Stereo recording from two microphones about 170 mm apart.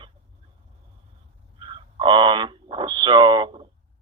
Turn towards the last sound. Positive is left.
turn(degrees=-30)  # may be behind; listen again after turning